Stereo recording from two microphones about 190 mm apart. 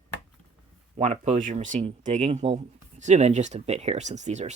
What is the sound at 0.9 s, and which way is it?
Speech, 35° right (ahead or behind).